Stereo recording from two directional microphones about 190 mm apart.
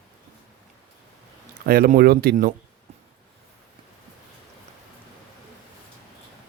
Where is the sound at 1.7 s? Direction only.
50° right (ahead or behind).